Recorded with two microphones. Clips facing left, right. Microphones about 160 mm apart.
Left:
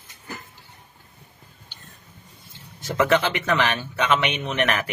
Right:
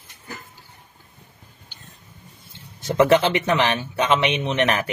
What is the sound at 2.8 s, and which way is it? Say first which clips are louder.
Speech: right 4 dB; 25° right (ahead or behind).